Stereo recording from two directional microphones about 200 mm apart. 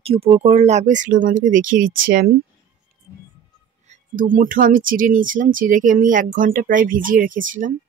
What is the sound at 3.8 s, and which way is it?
Speech, 40° right (ahead or behind).